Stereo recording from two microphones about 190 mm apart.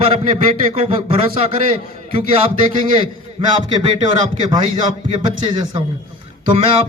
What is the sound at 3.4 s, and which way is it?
A man's voice, 30° right (ahead or behind).